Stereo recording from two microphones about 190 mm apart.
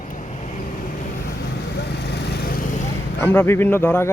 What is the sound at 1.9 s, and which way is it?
Vehicle, 60° left (ahead or behind).